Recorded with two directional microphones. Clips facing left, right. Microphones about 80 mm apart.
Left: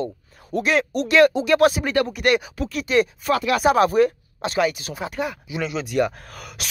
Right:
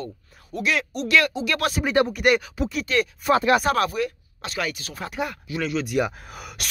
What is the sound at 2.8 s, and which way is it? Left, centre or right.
Speech, left.